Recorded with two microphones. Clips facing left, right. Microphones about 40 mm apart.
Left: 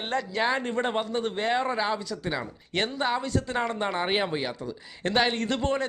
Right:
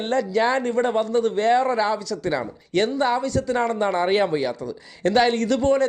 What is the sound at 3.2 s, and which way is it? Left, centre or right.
A man's voice, left.